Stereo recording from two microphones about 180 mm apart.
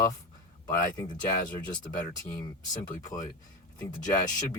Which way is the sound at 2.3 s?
20° left (ahead or behind).